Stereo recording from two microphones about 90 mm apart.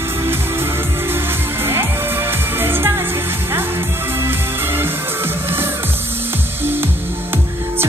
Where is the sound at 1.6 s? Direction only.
25° right (ahead or behind).